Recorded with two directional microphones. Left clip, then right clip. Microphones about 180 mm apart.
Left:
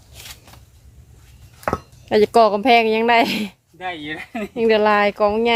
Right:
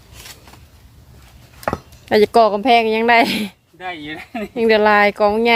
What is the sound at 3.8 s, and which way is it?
Speech, 5° right (ahead or behind).